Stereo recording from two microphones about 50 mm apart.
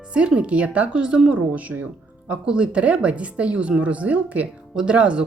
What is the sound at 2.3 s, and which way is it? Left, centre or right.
Speech, centre.